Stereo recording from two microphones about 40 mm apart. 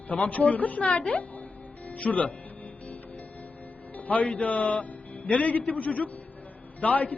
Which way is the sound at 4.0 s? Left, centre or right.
Left.